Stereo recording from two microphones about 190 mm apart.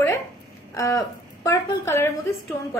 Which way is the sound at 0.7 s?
15° left (ahead or behind).